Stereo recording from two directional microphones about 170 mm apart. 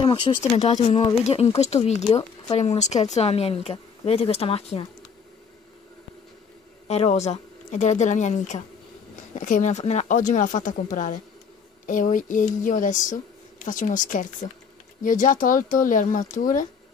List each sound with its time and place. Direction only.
0.0 s speech: 35° left (ahead or behind)
6.9 s speech: 40° left (ahead or behind)